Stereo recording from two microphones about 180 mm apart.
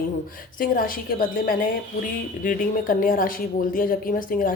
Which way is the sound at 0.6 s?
50° left (ahead or behind).